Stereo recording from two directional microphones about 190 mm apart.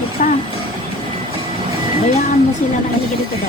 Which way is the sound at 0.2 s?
45° left (ahead or behind).